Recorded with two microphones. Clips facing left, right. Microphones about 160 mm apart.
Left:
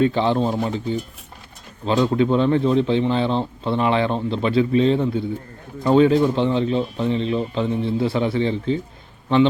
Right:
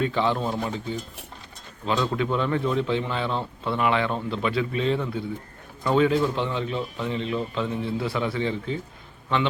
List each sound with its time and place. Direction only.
0.0 s speech: 30° left (ahead or behind)
1.8 s speech: 30° left (ahead or behind)